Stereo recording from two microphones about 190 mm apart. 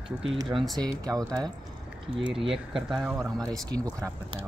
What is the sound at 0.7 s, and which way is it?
Speech, 20° right (ahead or behind).